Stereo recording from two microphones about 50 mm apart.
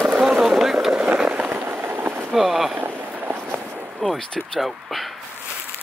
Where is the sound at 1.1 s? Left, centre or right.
Centre.